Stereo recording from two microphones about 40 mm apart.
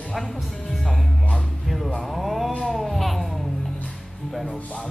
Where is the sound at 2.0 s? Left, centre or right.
Centre.